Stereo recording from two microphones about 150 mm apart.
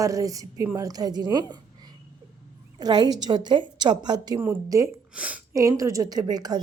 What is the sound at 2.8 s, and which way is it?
A woman's voice, 25° right (ahead or behind).